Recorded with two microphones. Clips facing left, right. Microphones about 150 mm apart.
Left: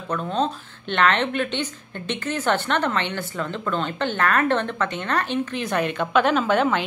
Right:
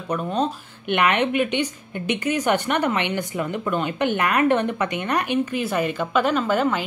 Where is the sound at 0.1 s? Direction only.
10° right (ahead or behind).